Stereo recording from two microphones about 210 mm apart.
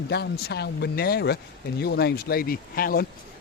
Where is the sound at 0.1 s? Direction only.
50° left (ahead or behind).